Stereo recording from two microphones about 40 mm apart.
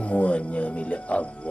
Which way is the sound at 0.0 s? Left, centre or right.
Left.